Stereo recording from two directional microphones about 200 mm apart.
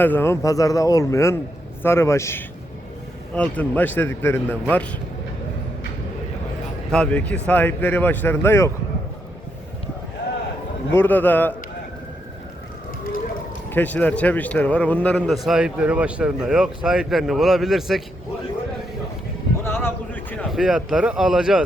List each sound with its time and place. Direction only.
0.0 s speech: 10° left (ahead or behind)
6.9 s speech: 5° left (ahead or behind)
10.9 s speech: 10° left (ahead or behind)
13.7 s a man's voice: 10° left (ahead or behind)
19.6 s a sound: 10° left (ahead or behind); by 21.6 s 5° right (ahead or behind)